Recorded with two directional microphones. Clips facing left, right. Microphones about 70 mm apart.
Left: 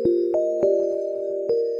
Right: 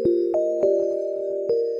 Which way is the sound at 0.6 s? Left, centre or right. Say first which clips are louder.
Even; left.